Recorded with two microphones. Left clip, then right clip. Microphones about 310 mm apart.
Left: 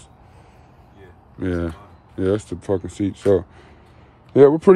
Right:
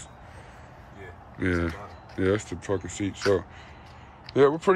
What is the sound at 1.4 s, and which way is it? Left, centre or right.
Speech, centre.